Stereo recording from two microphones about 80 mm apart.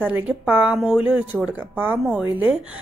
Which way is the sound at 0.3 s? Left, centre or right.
Centre.